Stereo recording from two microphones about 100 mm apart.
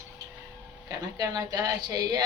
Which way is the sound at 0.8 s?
40° right (ahead or behind).